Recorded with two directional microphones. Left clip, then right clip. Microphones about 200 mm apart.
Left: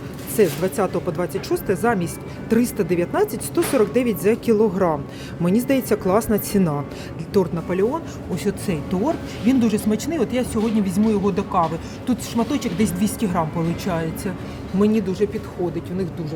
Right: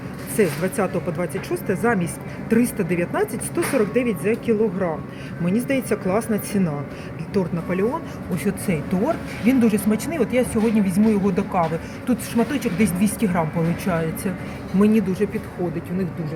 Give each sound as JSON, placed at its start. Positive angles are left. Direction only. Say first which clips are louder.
{"t": 0.3, "sound": "speech", "louder": "left 2 dB", "side_deg": 10}
{"t": 7.3, "sound": "speech", "louder": "left 3 dB", "side_deg": 15}
{"t": 8.4, "sound": "speech", "louder": "even", "side_deg": 0}